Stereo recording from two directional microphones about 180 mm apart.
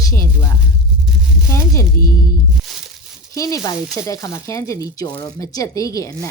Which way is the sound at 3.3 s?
20° left (ahead or behind).